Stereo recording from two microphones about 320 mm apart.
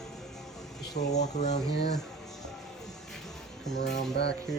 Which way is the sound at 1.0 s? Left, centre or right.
Centre.